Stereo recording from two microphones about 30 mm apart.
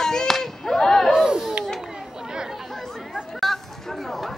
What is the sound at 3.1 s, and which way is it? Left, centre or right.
Chatter, centre.